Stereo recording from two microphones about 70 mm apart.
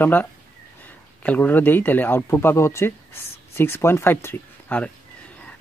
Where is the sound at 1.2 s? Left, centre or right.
Left.